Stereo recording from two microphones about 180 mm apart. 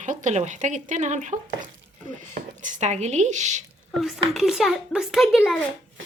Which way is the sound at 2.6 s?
40° right (ahead or behind).